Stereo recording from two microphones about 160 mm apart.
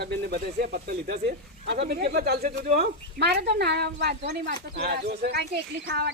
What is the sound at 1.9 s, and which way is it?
Speech, 75° right (ahead or behind).